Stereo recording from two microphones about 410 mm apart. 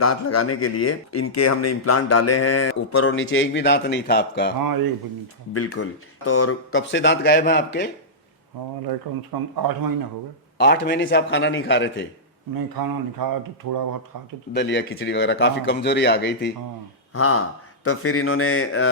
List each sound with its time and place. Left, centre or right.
0.0 s speech: left
5.5 s speech: left
8.9 s a man's voice: right
10.6 s speech: left
12.5 s a man's voice: right
14.5 s speech: left